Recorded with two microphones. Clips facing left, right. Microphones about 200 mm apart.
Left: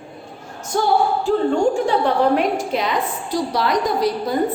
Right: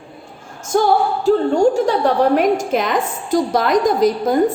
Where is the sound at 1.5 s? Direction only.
40° right (ahead or behind).